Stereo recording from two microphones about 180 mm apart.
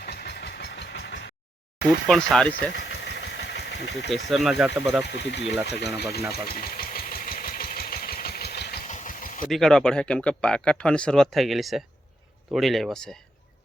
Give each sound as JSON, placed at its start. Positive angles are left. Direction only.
{"t": 0.0, "sound": "vehicle", "side_deg": 65}
{"t": 2.0, "sound": "speech", "side_deg": 5}
{"t": 2.7, "sound": "engine", "side_deg": 65}
{"t": 4.3, "sound": "speech", "side_deg": 0}
{"t": 5.0, "sound": "speech", "side_deg": 70}
{"t": 6.3, "sound": "engine", "side_deg": 55}
{"t": 8.9, "sound": "vehicle", "side_deg": 45}
{"t": 9.4, "sound": "speech", "side_deg": 0}